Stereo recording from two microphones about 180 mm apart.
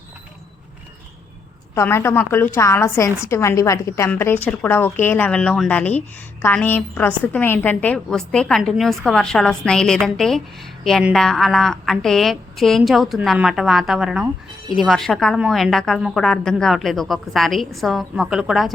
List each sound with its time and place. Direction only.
1.7 s a woman's voice: 15° left (ahead or behind); by 18.7 s centre (ahead or behind)